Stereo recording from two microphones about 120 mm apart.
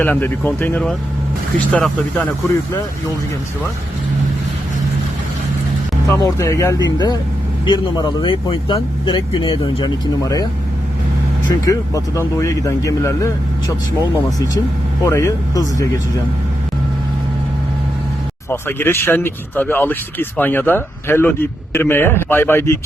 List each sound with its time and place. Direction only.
0.0 s speech: 15° left (ahead or behind)
6.2 s speech: 25° left (ahead or behind)
11.6 s speech: 25° left (ahead or behind)
18.5 s speech: 20° left (ahead or behind)